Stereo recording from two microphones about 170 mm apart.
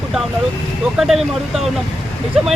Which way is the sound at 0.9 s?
5° right (ahead or behind).